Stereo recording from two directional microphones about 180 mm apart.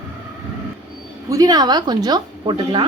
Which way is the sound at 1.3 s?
20° right (ahead or behind).